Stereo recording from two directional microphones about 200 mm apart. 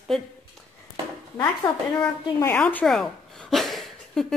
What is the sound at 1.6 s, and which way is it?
A woman's voice, 20° left (ahead or behind).